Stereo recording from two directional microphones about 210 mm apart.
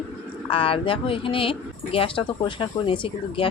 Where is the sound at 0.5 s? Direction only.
25° left (ahead or behind).